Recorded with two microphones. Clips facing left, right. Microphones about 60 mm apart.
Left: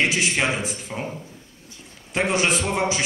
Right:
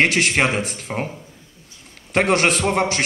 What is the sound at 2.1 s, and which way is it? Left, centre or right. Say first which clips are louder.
Speech: right 4 dB; right.